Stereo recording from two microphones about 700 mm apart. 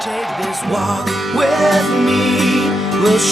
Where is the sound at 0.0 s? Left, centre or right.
Centre.